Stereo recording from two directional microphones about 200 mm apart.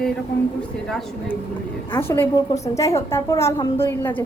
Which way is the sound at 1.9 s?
10° left (ahead or behind).